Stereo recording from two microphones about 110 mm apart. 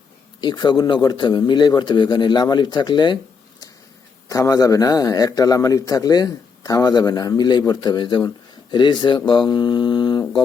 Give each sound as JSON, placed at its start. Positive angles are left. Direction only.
{"t": 0.4, "sound": "a man's voice", "side_deg": 40}
{"t": 4.3, "sound": "a man's voice", "side_deg": 30}